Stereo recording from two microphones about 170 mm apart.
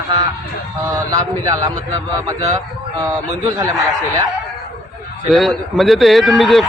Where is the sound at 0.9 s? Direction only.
20° right (ahead or behind).